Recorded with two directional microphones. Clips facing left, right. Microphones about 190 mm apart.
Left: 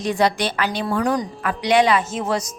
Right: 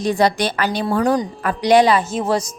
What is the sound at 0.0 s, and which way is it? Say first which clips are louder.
A woman's voice: right 3 dB; 35° right (ahead or behind).